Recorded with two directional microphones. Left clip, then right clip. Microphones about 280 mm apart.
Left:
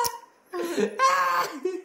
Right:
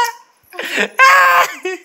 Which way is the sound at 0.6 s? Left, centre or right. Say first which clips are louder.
Right 12 dB; right.